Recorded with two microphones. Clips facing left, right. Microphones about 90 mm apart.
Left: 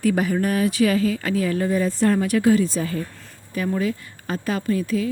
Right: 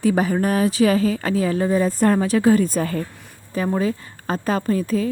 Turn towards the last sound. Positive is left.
turn(degrees=-35)  # may be behind; listen again after turning